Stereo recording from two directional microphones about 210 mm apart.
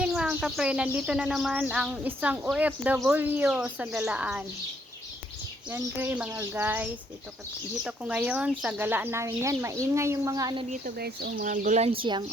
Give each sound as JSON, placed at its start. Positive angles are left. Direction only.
{"t": 0.0, "sound": "speech", "side_deg": -5}
{"t": 5.7, "sound": "speech", "side_deg": -10}
{"t": 7.9, "sound": "speech", "side_deg": -5}
{"t": 10.7, "sound": "speech", "side_deg": -45}